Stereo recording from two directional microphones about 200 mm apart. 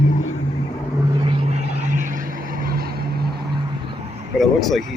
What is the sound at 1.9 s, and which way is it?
Vehicle, 40° right (ahead or behind).